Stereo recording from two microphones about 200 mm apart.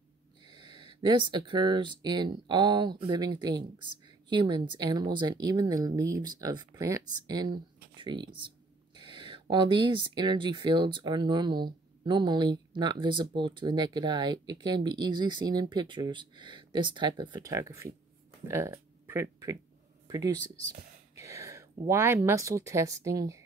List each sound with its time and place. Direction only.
0.4 s speech: 20° right (ahead or behind)